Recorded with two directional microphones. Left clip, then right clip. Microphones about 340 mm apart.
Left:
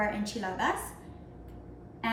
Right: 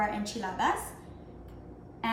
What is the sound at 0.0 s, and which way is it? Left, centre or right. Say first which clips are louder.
Speech: even; centre.